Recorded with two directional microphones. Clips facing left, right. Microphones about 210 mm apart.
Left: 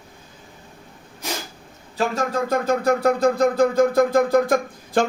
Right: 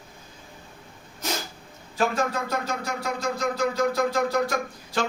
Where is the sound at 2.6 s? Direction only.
55° left (ahead or behind).